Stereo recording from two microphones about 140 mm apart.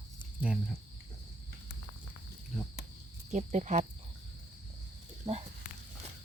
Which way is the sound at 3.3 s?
55° right (ahead or behind).